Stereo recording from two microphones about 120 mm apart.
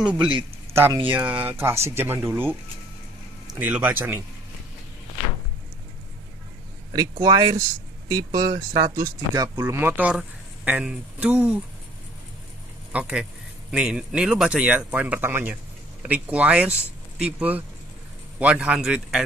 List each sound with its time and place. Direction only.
0.0 s speech: 10° right (ahead or behind)
3.5 s speech: 15° right (ahead or behind)
6.9 s speech: 30° right (ahead or behind); by 11.6 s 15° right (ahead or behind)
12.9 s speech: 5° right (ahead or behind)